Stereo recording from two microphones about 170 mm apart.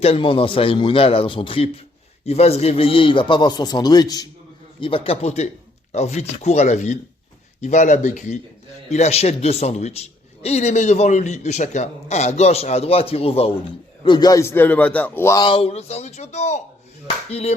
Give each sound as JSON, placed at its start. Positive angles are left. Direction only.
{"t": 0.0, "sound": "a man's voice", "side_deg": 35}
{"t": 14.0, "sound": "a man's voice", "side_deg": 25}
{"t": 15.4, "sound": "a man's voice", "side_deg": 35}